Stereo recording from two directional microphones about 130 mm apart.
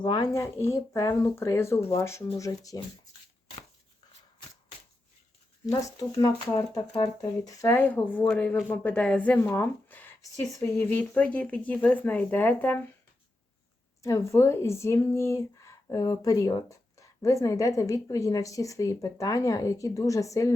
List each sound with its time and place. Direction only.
0.0 s speech: 35° left (ahead or behind)
0.3 s speech: 20° left (ahead or behind)
6.2 s a woman's voice: 30° left (ahead or behind)
10.8 s speech: 10° left (ahead or behind)
14.0 s speech: 25° left (ahead or behind)